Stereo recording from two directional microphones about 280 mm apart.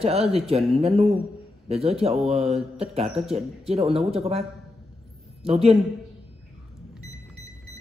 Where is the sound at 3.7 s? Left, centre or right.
Right.